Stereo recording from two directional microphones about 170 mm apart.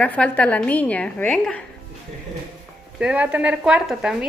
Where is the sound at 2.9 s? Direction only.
5° right (ahead or behind).